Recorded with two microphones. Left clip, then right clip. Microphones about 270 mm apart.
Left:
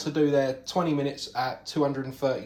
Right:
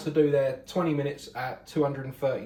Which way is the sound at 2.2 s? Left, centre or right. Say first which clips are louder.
Left 1 dB; centre.